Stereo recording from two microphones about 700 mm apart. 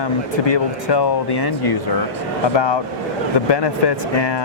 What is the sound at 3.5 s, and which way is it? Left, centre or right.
Speech, left.